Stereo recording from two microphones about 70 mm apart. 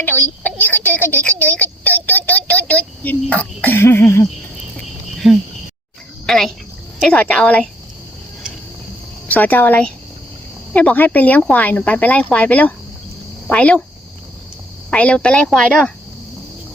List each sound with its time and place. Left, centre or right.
0.0 s a woman's voice: left
5.2 s speech: centre
6.2 s speech: centre
7.2 s speech: centre
9.2 s speech: left
14.8 s speech: centre